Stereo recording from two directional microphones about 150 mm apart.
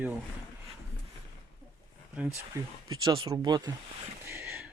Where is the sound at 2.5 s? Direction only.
20° right (ahead or behind).